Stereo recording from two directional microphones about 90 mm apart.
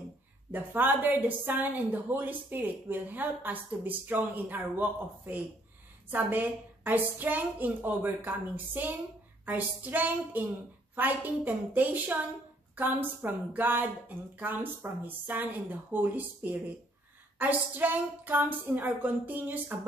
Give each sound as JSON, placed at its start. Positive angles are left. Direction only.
{"t": 0.5, "sound": "a woman's voice", "side_deg": -20}